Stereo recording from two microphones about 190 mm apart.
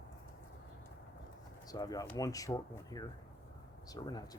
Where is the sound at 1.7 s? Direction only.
20° left (ahead or behind).